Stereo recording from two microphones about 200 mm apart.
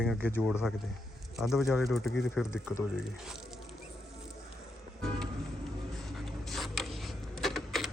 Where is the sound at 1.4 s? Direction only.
Centre (ahead or behind).